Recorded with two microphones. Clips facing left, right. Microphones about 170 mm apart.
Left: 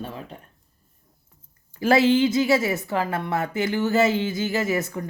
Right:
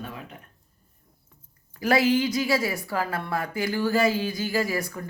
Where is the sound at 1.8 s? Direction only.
25° left (ahead or behind).